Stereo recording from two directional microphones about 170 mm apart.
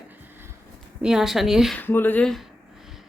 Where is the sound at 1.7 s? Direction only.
10° left (ahead or behind).